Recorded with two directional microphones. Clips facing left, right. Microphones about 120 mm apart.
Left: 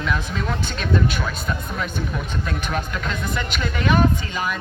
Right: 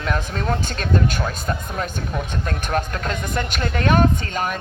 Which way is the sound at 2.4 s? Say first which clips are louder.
Right 4 dB; 45° right (ahead or behind).